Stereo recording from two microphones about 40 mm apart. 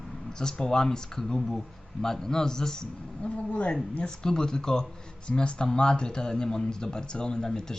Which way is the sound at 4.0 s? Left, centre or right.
Centre.